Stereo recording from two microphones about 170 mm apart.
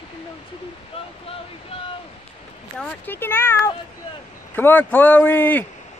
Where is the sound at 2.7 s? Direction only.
10° left (ahead or behind).